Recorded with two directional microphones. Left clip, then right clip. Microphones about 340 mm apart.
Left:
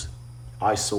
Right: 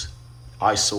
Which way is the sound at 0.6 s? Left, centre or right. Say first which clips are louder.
Right 3 dB; centre.